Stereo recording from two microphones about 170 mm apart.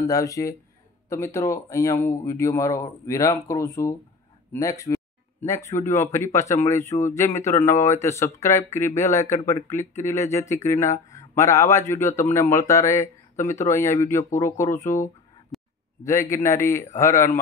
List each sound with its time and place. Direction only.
0.0 s speech: 20° left (ahead or behind)
15.5 s a sound: centre (ahead or behind)
16.0 s speech: 15° left (ahead or behind)